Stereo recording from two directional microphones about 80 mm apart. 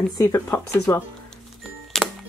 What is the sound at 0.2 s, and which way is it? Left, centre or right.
Speech, left.